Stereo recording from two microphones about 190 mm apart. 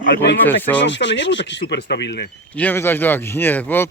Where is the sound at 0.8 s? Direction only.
70° left (ahead or behind).